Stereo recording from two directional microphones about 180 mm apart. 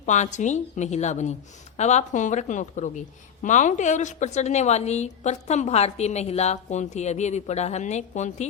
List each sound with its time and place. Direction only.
0.0 s a woman's voice: 40° left (ahead or behind)